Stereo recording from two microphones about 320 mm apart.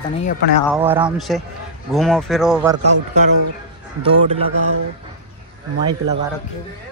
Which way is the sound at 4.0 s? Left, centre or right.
Centre.